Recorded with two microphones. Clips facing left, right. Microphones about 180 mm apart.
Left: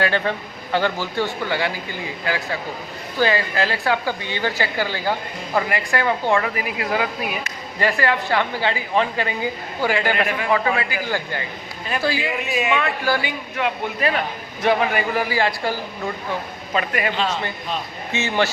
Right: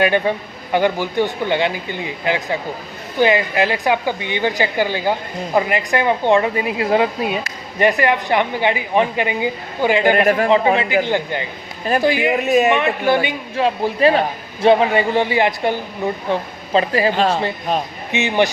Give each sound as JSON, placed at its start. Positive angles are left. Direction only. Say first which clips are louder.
{"t": 0.0, "sound": "a woman's voice", "louder": "right 5 dB", "side_deg": -15}
{"t": 10.2, "sound": "a man's voice", "louder": "right 8 dB", "side_deg": -45}
{"t": 10.8, "sound": "a woman's voice", "louder": "right 7 dB", "side_deg": -25}
{"t": 12.5, "sound": "speech", "louder": "right 11 dB", "side_deg": -40}
{"t": 12.7, "sound": "a woman's voice", "louder": "right 5 dB", "side_deg": -20}
{"t": 17.2, "sound": "a man's voice", "louder": "right 6 dB", "side_deg": -50}
{"t": 18.1, "sound": "a woman's voice", "louder": "right 4 dB", "side_deg": -15}